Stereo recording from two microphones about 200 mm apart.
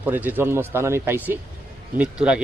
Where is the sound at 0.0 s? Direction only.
10° right (ahead or behind).